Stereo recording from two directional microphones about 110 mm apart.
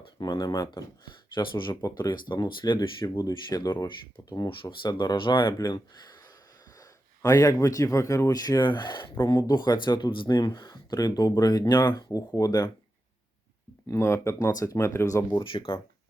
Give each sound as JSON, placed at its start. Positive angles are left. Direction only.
{"t": 0.2, "sound": "speech", "side_deg": 40}
{"t": 1.4, "sound": "speech", "side_deg": 45}
{"t": 4.4, "sound": "speech", "side_deg": 50}
{"t": 13.8, "sound": "speech", "side_deg": 25}
{"t": 15.4, "sound": "speech", "side_deg": 50}